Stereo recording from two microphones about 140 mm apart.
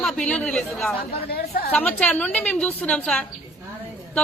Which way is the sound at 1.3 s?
90° left.